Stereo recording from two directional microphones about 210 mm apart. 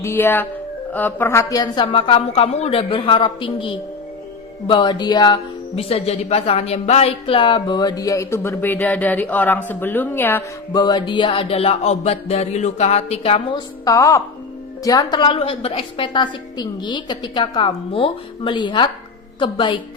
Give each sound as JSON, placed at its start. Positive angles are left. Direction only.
{"t": 0.0, "sound": "speech", "side_deg": 10}
{"t": 10.7, "sound": "speech", "side_deg": 20}
{"t": 13.8, "sound": "speech", "side_deg": 15}